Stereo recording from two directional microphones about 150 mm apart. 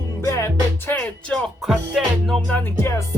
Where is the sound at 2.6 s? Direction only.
15° left (ahead or behind).